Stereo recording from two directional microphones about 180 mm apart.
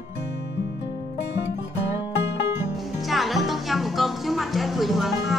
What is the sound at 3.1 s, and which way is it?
Music, centre (ahead or behind).